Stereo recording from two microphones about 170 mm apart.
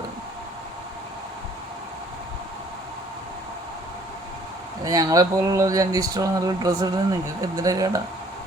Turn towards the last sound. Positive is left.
turn(degrees=-20)  # may be behind; listen again after turning